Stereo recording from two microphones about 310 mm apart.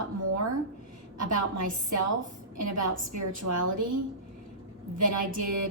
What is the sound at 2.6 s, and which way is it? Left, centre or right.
Speech, right.